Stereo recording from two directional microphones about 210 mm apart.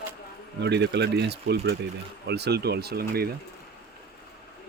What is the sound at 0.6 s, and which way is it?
Speech, 55° right (ahead or behind).